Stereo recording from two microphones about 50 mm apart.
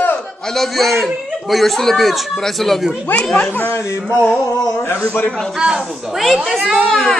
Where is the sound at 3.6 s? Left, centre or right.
Left.